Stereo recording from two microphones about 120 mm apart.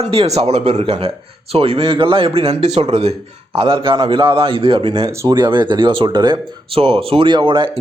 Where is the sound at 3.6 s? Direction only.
45° right (ahead or behind).